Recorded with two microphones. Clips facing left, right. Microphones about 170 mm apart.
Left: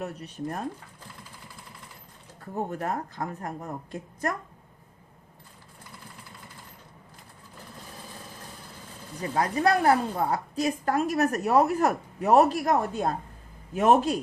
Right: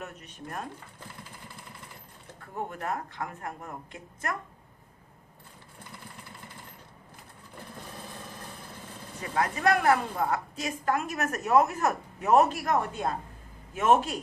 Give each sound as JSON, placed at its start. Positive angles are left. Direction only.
{"t": 0.0, "sound": "a woman's voice", "side_deg": 35}
{"t": 2.6, "sound": "a woman's voice", "side_deg": 40}
{"t": 9.3, "sound": "a woman's voice", "side_deg": 35}